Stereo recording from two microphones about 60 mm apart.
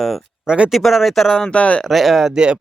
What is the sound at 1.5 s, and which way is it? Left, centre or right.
Speech, centre.